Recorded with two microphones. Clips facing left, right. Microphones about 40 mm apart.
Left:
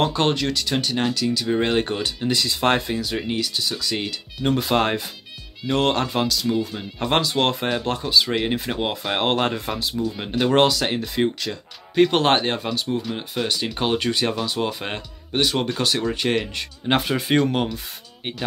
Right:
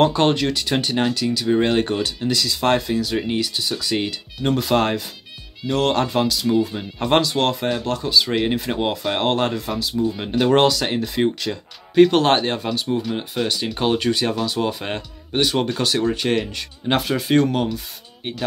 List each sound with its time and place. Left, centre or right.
0.0 s speech: centre
1.0 s speech: centre; by 2.8 s left
2.9 s speech: centre
4.6 s speech: centre
7.3 s speech: centre
8.3 s speech: centre
9.2 s speech: centre
10.1 s speech: centre